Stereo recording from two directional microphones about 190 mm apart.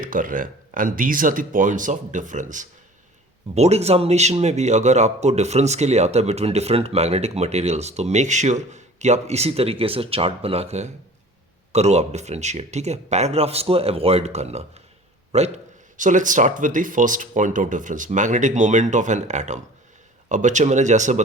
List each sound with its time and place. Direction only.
0.0 s speech: 45° right (ahead or behind)